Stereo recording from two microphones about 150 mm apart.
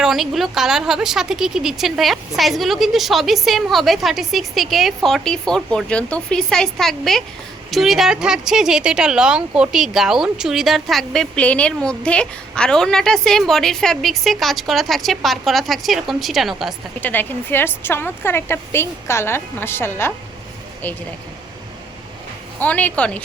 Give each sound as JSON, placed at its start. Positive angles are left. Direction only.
{"t": 0.0, "sound": "speech", "side_deg": 0}
{"t": 17.0, "sound": "a woman's voice", "side_deg": 10}
{"t": 22.6, "sound": "a woman's voice", "side_deg": 10}